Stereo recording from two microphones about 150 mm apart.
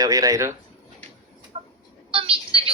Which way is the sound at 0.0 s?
25° right (ahead or behind).